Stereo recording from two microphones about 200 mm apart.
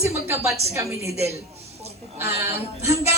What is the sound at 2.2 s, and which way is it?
Speech, 10° right (ahead or behind).